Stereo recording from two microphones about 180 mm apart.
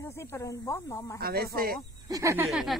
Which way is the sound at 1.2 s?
60° right (ahead or behind).